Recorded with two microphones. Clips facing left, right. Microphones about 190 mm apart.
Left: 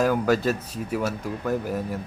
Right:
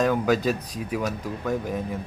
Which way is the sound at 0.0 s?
5° left (ahead or behind).